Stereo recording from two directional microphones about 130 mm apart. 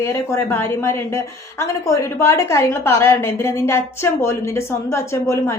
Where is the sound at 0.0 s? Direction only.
20° left (ahead or behind).